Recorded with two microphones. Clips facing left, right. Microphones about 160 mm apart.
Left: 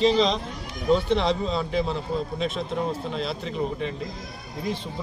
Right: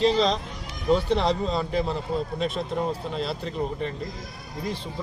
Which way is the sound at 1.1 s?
40° right (ahead or behind).